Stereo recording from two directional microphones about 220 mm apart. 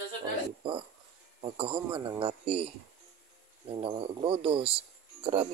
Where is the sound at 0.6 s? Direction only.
25° right (ahead or behind).